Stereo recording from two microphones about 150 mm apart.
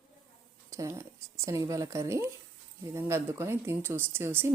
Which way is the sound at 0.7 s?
20° right (ahead or behind).